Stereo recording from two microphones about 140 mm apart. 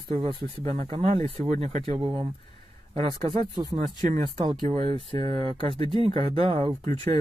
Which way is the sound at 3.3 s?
40° right (ahead or behind).